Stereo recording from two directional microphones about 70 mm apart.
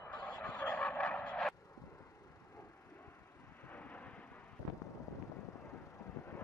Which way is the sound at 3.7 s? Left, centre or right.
Left.